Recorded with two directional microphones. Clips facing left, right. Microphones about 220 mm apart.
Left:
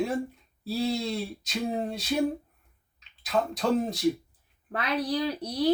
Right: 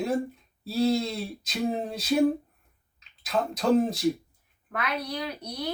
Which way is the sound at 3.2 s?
Centre (ahead or behind).